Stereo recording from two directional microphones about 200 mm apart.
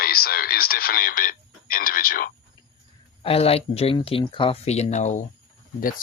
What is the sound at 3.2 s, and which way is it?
Speech, 30° left (ahead or behind).